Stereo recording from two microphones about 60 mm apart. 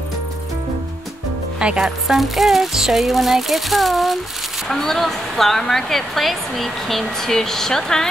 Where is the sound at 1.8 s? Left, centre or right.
Centre.